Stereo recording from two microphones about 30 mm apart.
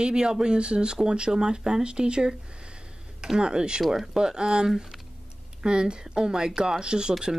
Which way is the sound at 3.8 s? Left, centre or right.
Centre.